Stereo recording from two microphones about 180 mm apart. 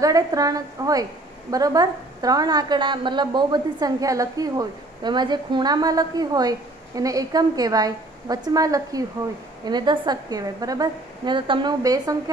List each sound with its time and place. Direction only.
0.0 s a woman's voice: 20° right (ahead or behind)